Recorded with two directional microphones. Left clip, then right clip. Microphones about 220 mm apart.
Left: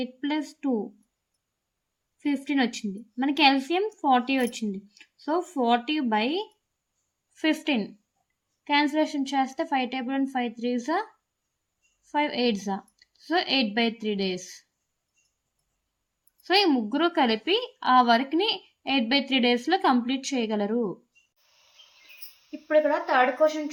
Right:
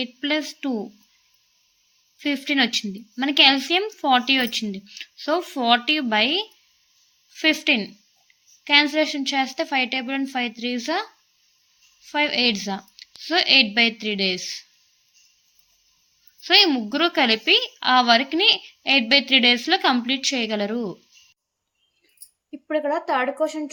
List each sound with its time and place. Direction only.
0.0 s a woman's voice: 5° right (ahead or behind)
2.1 s a woman's voice: 5° right (ahead or behind)
12.1 s a woman's voice: centre (ahead or behind)
16.4 s a woman's voice: centre (ahead or behind)
22.7 s speech: 50° right (ahead or behind)